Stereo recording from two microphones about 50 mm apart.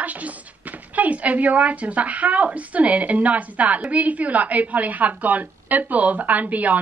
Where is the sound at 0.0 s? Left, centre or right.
Right.